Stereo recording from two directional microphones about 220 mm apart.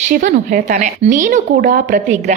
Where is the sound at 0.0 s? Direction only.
35° right (ahead or behind).